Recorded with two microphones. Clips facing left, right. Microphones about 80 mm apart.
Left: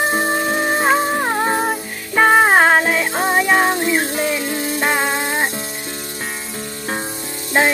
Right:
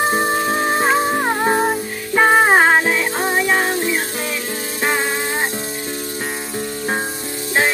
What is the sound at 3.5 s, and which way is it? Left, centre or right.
Music, centre.